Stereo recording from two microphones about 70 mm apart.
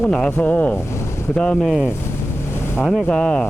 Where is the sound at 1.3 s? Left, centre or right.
Centre.